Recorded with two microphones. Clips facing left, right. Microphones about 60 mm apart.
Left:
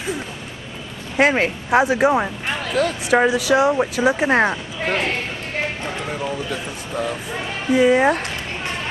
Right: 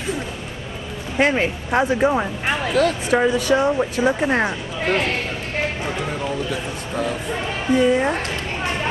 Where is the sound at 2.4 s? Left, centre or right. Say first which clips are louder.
Right 3 dB; centre.